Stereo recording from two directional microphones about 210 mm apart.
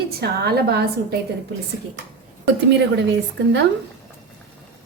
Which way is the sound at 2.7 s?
55° right (ahead or behind).